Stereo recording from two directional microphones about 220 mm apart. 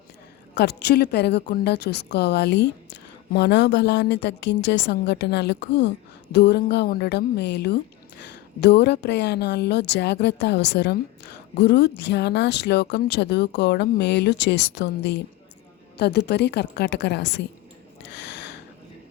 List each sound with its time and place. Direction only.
0.5 s a woman's voice: 50° left (ahead or behind)
18.0 s gasp: 50° left (ahead or behind)